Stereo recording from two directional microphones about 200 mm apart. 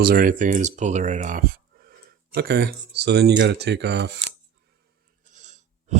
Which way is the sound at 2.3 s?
50° right (ahead or behind).